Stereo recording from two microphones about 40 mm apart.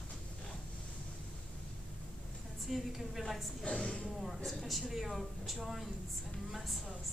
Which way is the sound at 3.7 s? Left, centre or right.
Centre.